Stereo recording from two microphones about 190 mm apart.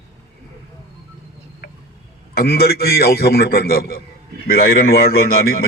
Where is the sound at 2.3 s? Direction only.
55° left (ahead or behind).